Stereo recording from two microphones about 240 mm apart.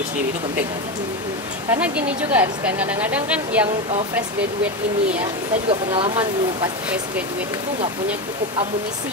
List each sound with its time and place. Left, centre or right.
1.7 s speech: centre
5.7 s speech: right
6.1 s speech: centre